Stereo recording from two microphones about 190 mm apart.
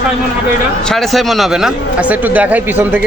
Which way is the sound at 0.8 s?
Centre (ahead or behind).